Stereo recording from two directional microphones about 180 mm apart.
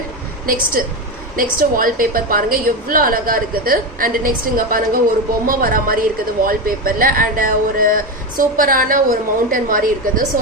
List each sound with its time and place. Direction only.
0.4 s a woman's voice: 50° right (ahead or behind)